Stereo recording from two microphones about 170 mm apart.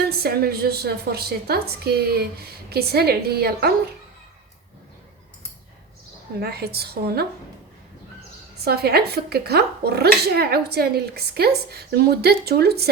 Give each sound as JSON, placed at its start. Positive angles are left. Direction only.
{"t": 0.1, "sound": "a woman's voice", "side_deg": -65}
{"t": 6.4, "sound": "a woman's voice", "side_deg": -70}
{"t": 8.6, "sound": "a woman's voice", "side_deg": -70}